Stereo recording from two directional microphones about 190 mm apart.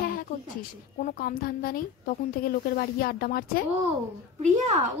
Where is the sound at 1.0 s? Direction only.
45° left (ahead or behind).